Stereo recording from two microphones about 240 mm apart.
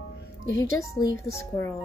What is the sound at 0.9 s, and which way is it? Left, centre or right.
Speech, centre.